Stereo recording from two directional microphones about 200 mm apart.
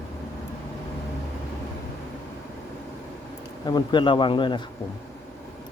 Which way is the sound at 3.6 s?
20° left (ahead or behind).